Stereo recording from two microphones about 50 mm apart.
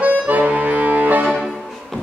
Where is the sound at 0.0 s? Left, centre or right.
Right.